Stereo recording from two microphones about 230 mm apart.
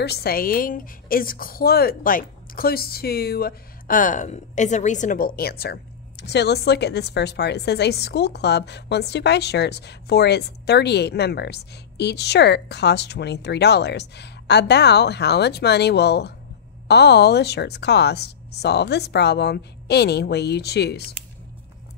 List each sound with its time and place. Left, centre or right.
0.0 s a woman's voice: left